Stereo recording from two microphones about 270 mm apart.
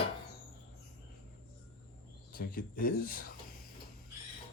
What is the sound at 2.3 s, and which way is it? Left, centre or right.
Speech, left.